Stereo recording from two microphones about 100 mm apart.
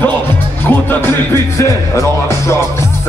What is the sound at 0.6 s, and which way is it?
Speech, 20° left (ahead or behind).